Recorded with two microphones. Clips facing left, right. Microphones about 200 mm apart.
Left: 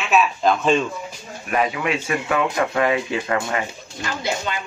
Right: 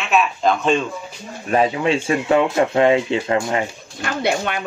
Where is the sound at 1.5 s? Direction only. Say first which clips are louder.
Right 4 dB; 30° right (ahead or behind).